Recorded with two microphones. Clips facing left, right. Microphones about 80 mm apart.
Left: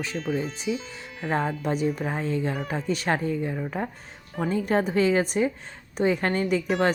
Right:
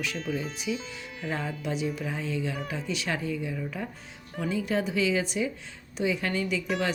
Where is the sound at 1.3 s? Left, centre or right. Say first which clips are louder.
Left 6 dB; left.